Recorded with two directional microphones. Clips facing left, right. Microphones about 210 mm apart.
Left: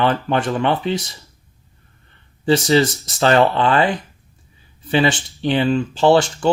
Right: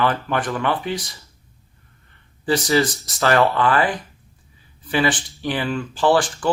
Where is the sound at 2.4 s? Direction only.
25° left (ahead or behind).